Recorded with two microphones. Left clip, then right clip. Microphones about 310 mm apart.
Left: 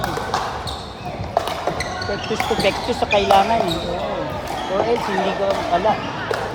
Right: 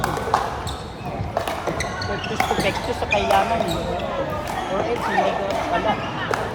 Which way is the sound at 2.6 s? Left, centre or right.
Left.